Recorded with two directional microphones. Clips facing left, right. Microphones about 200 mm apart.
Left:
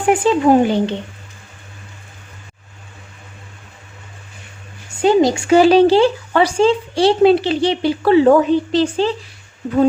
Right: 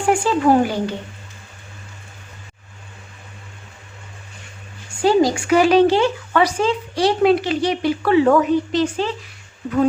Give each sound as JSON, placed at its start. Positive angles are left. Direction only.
{"t": 0.0, "sound": "a woman's voice", "side_deg": 20}
{"t": 4.9, "sound": "a woman's voice", "side_deg": 20}